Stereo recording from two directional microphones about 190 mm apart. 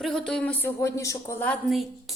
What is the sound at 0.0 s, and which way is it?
Speech, centre (ahead or behind).